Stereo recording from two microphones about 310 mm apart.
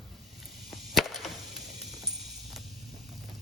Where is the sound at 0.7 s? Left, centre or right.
Centre.